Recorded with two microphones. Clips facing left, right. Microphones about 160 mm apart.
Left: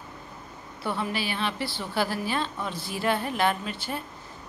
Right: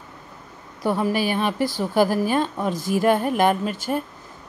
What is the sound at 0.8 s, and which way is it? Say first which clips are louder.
A woman's voice: right 8 dB; 40° right (ahead or behind).